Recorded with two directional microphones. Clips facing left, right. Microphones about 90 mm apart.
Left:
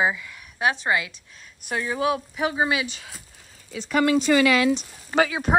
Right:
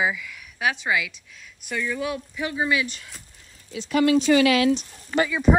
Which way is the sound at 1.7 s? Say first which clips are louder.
Left 3 dB; 55° left (ahead or behind).